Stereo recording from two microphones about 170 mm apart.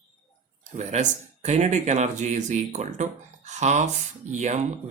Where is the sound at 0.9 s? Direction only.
45° right (ahead or behind).